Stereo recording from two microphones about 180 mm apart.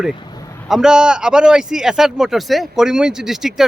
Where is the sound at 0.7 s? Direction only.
5° right (ahead or behind).